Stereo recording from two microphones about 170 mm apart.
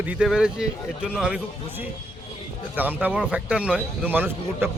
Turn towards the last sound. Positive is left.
turn(degrees=-10)  # may be behind; listen again after turning